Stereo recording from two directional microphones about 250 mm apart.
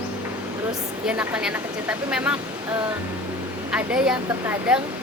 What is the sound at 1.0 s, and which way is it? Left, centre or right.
Speech, centre.